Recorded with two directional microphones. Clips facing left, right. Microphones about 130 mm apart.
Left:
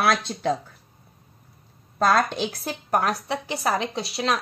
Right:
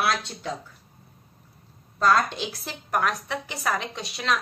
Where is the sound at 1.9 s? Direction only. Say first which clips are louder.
Left 1 dB; 45° left (ahead or behind).